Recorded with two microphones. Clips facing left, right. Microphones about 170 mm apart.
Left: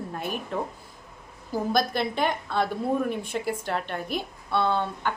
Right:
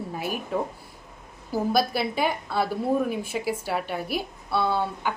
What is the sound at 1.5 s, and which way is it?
A woman's voice, 5° right (ahead or behind).